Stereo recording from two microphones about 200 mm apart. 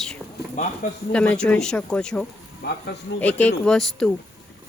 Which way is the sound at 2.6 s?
55° left (ahead or behind).